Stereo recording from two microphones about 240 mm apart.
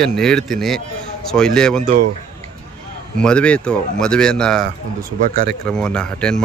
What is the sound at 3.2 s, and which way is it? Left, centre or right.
Speech, centre.